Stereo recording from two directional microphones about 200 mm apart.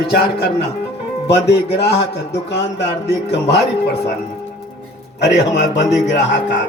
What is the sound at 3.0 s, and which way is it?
Speech, 55° left (ahead or behind).